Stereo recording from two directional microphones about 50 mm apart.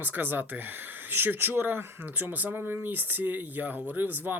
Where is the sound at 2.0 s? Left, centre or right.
Right.